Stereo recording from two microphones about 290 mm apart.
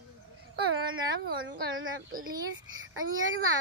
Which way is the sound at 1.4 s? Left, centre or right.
Right.